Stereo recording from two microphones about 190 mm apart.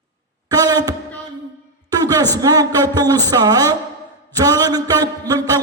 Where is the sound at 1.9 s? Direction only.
20° right (ahead or behind).